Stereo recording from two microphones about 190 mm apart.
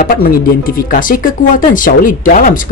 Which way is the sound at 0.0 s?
50° left (ahead or behind).